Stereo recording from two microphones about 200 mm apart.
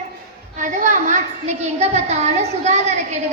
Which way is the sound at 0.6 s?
40° right (ahead or behind).